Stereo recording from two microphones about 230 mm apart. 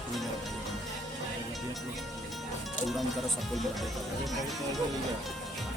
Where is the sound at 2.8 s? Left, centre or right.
Centre.